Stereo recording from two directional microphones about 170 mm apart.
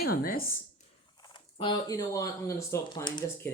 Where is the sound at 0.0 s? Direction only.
60° left (ahead or behind).